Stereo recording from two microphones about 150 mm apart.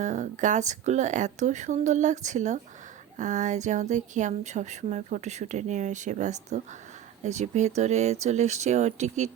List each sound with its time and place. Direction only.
0.0 s speech: 55° right (ahead or behind)